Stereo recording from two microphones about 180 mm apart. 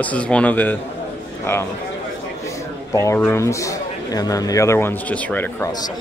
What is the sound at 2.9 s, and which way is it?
Speech, 15° left (ahead or behind).